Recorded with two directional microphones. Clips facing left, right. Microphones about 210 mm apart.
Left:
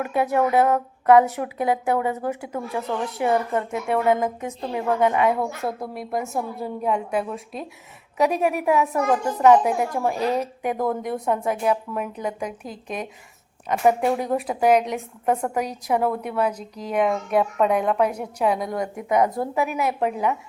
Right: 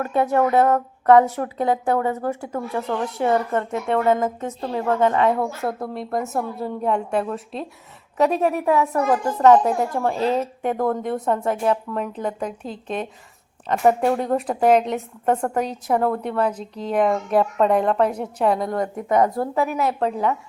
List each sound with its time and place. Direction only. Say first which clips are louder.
0.0 s a woman's voice: right 2 dB; 10° left (ahead or behind)
10.2 s speech: right 3 dB; 25° right (ahead or behind)
10.6 s speech: right 2 dB; 15° left (ahead or behind)
13.8 s a woman's voice: right 2 dB; 10° left (ahead or behind)